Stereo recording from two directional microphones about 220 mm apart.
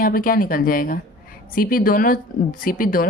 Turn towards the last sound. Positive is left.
turn(degrees=40)  # may be behind; listen again after turning